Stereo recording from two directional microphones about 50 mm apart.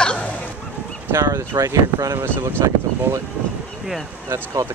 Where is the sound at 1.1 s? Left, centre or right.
Right.